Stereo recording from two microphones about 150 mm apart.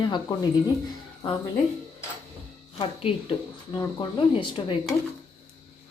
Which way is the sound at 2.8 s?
40° left (ahead or behind).